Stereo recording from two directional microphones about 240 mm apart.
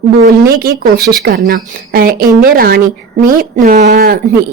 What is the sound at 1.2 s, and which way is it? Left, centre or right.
A woman's voice, right.